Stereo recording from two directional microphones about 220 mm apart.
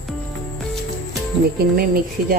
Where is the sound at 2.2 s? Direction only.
40° right (ahead or behind).